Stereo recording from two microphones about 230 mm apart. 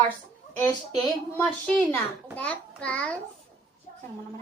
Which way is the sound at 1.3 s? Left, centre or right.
Centre.